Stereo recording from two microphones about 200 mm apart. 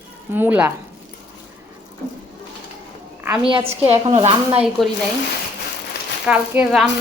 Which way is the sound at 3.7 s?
30° right (ahead or behind).